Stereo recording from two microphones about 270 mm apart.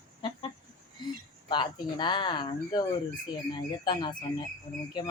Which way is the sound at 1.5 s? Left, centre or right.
Centre.